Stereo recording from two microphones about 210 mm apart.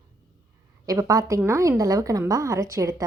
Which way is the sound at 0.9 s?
15° right (ahead or behind).